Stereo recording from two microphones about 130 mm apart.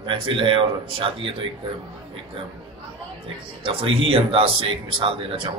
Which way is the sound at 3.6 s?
45° right (ahead or behind).